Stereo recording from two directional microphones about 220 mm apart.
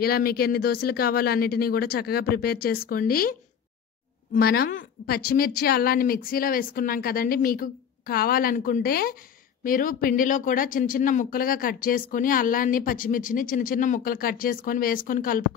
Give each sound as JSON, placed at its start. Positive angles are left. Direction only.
{"t": 0.0, "sound": "speech", "side_deg": 45}